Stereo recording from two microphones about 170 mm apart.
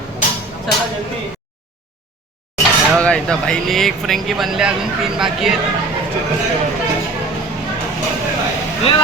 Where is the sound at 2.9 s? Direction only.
5° left (ahead or behind).